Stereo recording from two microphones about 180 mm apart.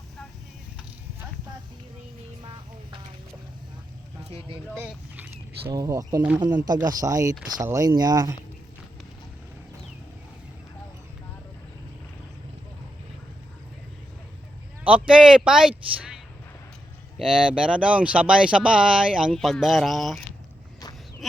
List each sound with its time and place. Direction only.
2.4 s vehicle: 25° right (ahead or behind)
4.4 s speech: 30° right (ahead or behind)
4.8 s a sound: 10° right (ahead or behind)
5.7 s speech: 20° right (ahead or behind)
14.8 s speech: 5° right (ahead or behind)